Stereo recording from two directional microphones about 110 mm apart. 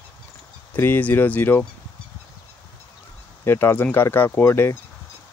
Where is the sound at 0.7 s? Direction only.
15° left (ahead or behind).